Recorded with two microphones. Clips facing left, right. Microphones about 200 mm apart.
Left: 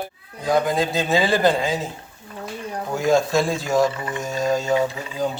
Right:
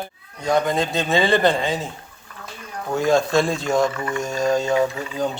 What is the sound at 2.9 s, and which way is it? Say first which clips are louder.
Speech: right 1 dB; centre (ahead or behind).